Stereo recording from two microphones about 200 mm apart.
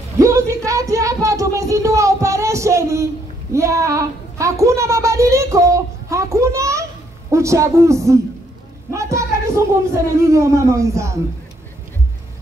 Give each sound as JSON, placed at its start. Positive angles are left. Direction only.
{"t": 0.2, "sound": "a sound", "side_deg": -15}
{"t": 8.9, "sound": "music", "side_deg": -15}
{"t": 10.2, "sound": "speech", "side_deg": -15}